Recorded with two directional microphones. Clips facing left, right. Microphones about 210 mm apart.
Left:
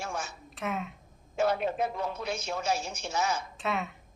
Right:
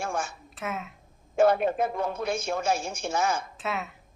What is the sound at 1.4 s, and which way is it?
A man's voice, 50° right (ahead or behind).